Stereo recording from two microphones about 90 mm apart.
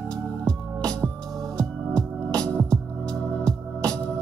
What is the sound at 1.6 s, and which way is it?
Music, 10° left (ahead or behind).